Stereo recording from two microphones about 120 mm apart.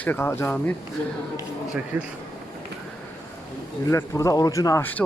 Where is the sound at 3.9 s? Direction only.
25° left (ahead or behind).